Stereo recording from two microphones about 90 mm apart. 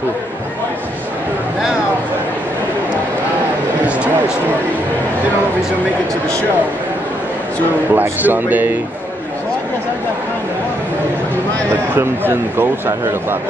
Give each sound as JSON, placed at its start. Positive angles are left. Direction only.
{"t": 7.9, "sound": "a man's voice", "side_deg": -20}
{"t": 12.0, "sound": "a man's voice", "side_deg": -25}